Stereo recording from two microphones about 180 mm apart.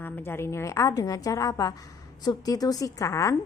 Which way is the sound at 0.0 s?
15° left (ahead or behind).